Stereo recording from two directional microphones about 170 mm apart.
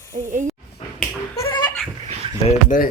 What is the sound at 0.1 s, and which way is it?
Speech, 45° right (ahead or behind).